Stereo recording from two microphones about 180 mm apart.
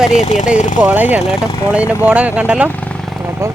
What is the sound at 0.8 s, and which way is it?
Speech, 10° right (ahead or behind).